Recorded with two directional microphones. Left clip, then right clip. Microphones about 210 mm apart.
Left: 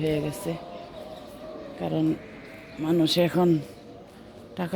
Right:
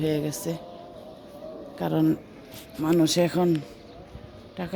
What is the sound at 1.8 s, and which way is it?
Speech, 15° right (ahead or behind).